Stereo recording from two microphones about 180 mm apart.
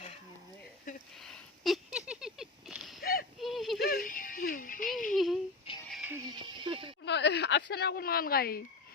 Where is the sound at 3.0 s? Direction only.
55° left (ahead or behind).